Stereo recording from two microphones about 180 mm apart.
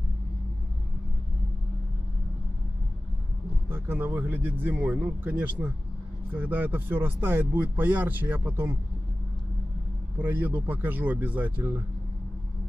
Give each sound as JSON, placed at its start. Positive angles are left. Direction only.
{"t": 3.6, "sound": "speech", "side_deg": -10}
{"t": 10.2, "sound": "speech", "side_deg": -10}